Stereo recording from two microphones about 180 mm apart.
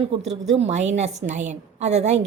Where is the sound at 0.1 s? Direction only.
35° right (ahead or behind).